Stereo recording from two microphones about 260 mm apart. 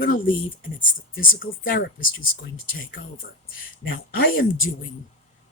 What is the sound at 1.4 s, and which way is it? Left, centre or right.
Speech, left.